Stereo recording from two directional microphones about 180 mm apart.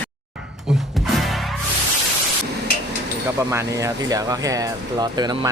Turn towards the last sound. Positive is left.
turn(degrees=-20)  # may be behind; listen again after turning